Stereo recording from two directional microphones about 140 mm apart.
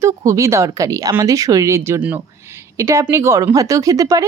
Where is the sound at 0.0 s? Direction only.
20° right (ahead or behind).